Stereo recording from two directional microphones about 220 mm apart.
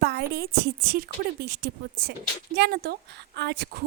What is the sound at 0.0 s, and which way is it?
A woman's voice, 45° right (ahead or behind).